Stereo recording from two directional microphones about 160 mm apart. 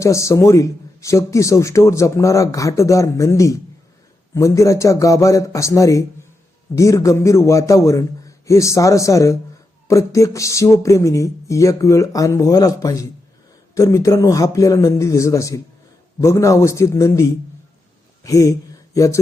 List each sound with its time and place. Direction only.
0.0 s speech: 20° left (ahead or behind)